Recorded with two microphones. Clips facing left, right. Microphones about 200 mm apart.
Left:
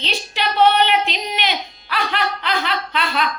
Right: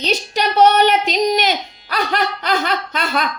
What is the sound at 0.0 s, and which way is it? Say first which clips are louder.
A woman's voice: right 5 dB; 45° right (ahead or behind).